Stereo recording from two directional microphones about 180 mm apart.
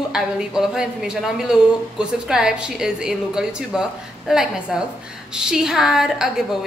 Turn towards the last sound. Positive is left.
turn(degrees=-5)  # may be behind; listen again after turning